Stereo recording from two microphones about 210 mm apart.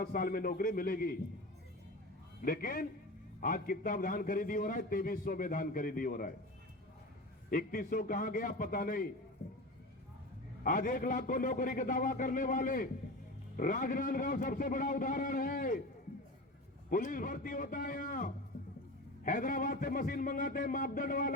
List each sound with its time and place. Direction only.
0.0 s a man's voice: 45° left (ahead or behind)
2.4 s a man's voice: 45° left (ahead or behind)
7.5 s a man's voice: 40° left (ahead or behind)
10.6 s a man's voice: 40° left (ahead or behind)
16.9 s a man's voice: 40° left (ahead or behind)